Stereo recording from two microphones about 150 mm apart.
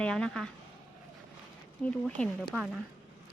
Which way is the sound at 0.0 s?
5° left (ahead or behind).